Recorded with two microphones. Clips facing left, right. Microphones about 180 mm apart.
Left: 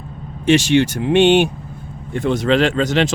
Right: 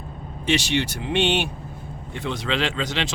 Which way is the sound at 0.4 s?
50° left (ahead or behind).